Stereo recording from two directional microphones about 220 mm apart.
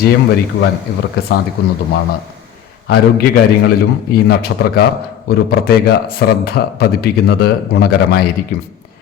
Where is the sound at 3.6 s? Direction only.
45° left (ahead or behind).